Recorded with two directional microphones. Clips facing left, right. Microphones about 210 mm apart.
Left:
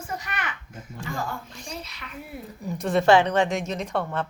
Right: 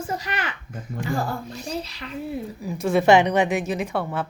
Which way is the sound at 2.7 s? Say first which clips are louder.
Right 2 dB; centre (ahead or behind).